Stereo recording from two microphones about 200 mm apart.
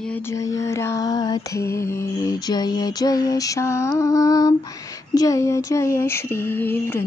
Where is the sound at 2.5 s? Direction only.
20° left (ahead or behind).